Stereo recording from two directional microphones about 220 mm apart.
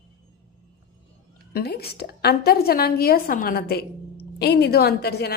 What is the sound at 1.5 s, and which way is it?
A woman's voice, 45° left (ahead or behind).